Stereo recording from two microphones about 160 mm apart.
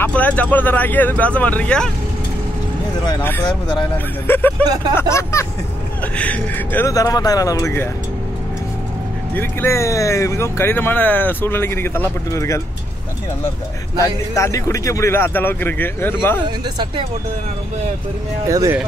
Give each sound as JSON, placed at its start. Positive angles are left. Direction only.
{"t": 0.0, "sound": "speech", "side_deg": 10}
{"t": 3.2, "sound": "speech", "side_deg": 10}
{"t": 6.9, "sound": "speech", "side_deg": 20}
{"t": 9.3, "sound": "speech", "side_deg": 15}
{"t": 14.0, "sound": "speech", "side_deg": 20}
{"t": 16.4, "sound": "speech", "side_deg": -30}
{"t": 18.5, "sound": "speech", "side_deg": -20}